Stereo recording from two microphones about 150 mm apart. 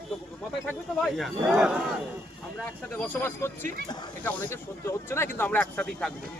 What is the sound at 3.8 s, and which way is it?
Speech, 30° left (ahead or behind).